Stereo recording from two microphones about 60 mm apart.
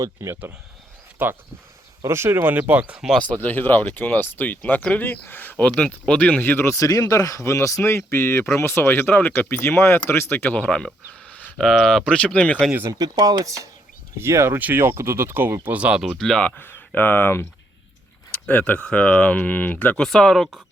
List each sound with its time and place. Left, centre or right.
0.0 s speech: right
1.2 s speech: right
2.0 s speech: right
3.4 s speech: left
6.7 s speech: left
10.5 s speech: left
11.5 s speech: centre
12.9 s speech: right
14.2 s speech: right
15.7 s speech: right
16.0 s speech: centre
16.6 s speech: left
18.4 s speech: left
20.0 s speech: centre